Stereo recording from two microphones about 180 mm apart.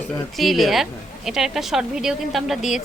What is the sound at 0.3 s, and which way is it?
A woman's voice, centre (ahead or behind).